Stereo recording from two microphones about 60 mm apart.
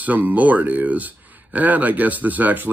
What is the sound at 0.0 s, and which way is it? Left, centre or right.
Speech, right.